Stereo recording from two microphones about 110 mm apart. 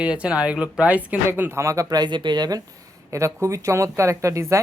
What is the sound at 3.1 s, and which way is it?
Speech, 25° right (ahead or behind).